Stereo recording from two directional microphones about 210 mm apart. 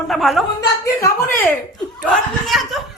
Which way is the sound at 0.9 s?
10° left (ahead or behind).